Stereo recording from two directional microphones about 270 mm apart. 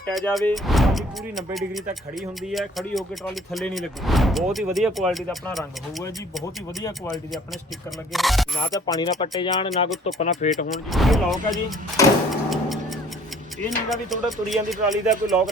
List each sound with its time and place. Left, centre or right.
0.1 s speech: centre
2.5 s speech: centre
8.1 s speech: centre
8.7 s speech: centre
10.9 s speech: centre
12.0 s speech: centre
12.3 s tick-tock: centre
13.7 s speech: centre